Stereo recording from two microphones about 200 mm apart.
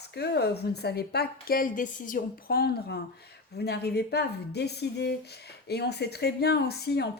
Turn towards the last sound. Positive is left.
turn(degrees=55)  # may be behind; listen again after turning